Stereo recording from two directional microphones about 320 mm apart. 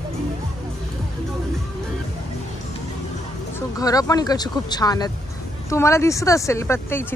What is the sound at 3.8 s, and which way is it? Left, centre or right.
Speech, centre.